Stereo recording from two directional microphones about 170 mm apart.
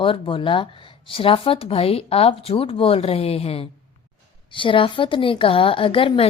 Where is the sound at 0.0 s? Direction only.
30° left (ahead or behind).